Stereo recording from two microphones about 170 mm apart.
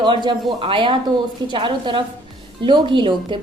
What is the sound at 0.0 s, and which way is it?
A woman's voice, 30° right (ahead or behind).